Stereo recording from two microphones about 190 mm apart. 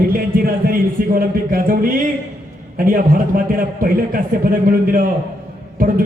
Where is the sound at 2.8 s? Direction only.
45° right (ahead or behind).